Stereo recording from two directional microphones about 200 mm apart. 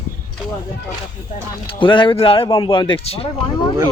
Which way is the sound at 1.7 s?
25° left (ahead or behind).